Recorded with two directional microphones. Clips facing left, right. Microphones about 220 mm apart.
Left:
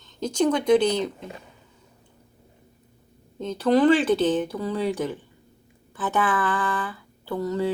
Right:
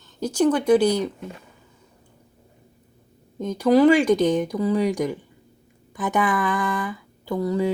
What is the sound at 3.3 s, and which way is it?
Speech, 15° right (ahead or behind).